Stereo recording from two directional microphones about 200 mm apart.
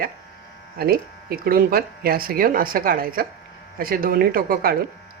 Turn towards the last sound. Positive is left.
turn(degrees=-50)  # may be behind; listen again after turning